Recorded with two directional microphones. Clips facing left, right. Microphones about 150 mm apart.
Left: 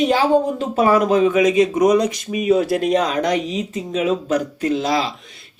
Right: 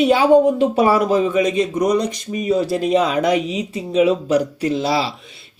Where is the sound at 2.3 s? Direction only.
5° left (ahead or behind).